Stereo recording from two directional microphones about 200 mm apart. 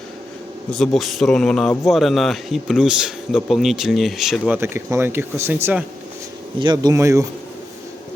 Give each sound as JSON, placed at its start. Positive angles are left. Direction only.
{"t": 0.7, "sound": "speech", "side_deg": 0}
{"t": 6.6, "sound": "speech", "side_deg": -20}